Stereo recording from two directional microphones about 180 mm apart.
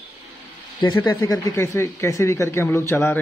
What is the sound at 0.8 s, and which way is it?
Speech, 25° left (ahead or behind).